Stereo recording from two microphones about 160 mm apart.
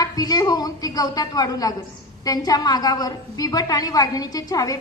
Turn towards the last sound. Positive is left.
turn(degrees=20)  # may be behind; listen again after turning